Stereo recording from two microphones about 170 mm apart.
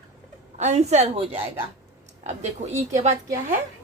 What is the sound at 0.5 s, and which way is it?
Speech, 40° right (ahead or behind).